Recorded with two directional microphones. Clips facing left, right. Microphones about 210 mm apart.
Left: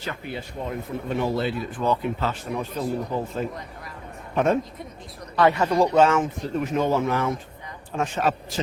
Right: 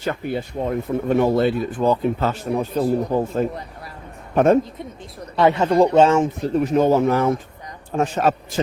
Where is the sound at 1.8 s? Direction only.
30° right (ahead or behind).